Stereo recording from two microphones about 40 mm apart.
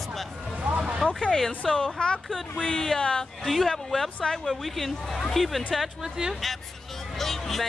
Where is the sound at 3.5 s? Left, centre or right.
Centre.